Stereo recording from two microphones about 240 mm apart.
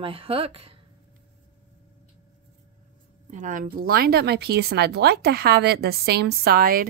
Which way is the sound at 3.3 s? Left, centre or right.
Right.